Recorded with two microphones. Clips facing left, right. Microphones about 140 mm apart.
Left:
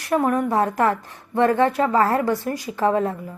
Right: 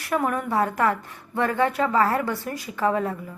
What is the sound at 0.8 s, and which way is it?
Speech, 40° left (ahead or behind).